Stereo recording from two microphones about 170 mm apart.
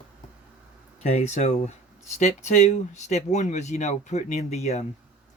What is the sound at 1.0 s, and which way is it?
Speech, 40° left (ahead or behind).